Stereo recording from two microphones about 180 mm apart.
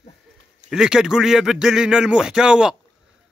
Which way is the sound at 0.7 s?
5° right (ahead or behind).